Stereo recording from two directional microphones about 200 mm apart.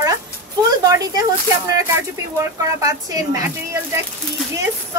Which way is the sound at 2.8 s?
15° right (ahead or behind).